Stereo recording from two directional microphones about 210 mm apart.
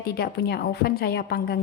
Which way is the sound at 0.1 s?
50° left (ahead or behind).